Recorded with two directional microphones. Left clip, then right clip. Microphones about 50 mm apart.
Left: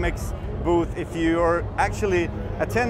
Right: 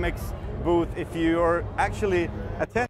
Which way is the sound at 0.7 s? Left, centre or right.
Right.